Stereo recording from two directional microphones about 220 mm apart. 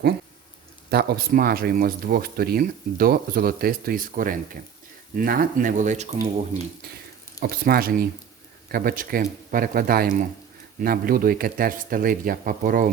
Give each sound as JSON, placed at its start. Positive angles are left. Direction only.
{"t": 0.9, "sound": "speech", "side_deg": -45}
{"t": 7.3, "sound": "speech", "side_deg": -45}